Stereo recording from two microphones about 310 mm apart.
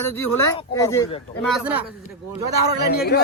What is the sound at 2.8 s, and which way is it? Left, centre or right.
Speech, left.